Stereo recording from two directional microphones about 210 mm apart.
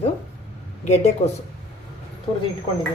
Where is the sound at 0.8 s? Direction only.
30° left (ahead or behind).